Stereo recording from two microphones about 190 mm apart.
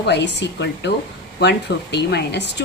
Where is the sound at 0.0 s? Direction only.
65° left (ahead or behind).